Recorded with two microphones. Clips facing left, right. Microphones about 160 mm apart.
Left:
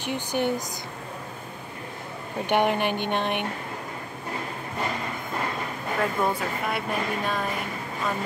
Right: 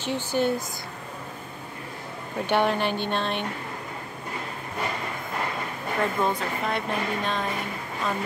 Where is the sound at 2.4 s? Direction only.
15° left (ahead or behind).